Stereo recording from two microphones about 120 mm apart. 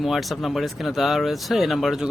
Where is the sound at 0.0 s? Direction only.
Centre (ahead or behind).